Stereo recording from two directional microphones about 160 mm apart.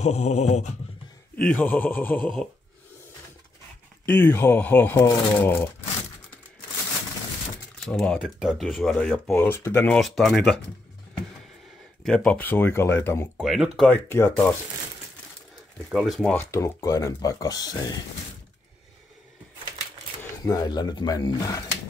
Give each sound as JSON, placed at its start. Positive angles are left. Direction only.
{"t": 0.0, "sound": "a sound", "side_deg": 45}
{"t": 1.5, "sound": "speech", "side_deg": 10}
{"t": 4.0, "sound": "speech", "side_deg": 15}
{"t": 7.8, "sound": "speech", "side_deg": 0}
{"t": 9.4, "sound": "speech", "side_deg": 15}
{"t": 9.9, "sound": "speech", "side_deg": 0}
{"t": 12.0, "sound": "speech", "side_deg": 5}
{"t": 13.4, "sound": "speech", "side_deg": 0}
{"t": 14.0, "sound": "speech", "side_deg": 15}
{"t": 15.9, "sound": "speech", "side_deg": 0}
{"t": 16.4, "sound": "speech", "side_deg": 20}
{"t": 20.4, "sound": "speech", "side_deg": 25}